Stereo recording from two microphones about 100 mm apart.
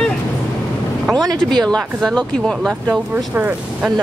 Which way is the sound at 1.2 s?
40° right (ahead or behind).